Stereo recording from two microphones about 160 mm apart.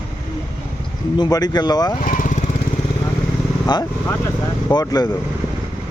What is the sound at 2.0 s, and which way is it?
Lawn mower, 60° left (ahead or behind).